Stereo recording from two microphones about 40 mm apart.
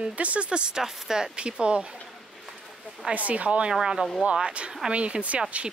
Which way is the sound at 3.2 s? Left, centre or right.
Right.